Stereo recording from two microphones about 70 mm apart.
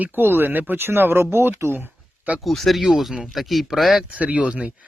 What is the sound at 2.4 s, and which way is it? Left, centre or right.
Speech, centre.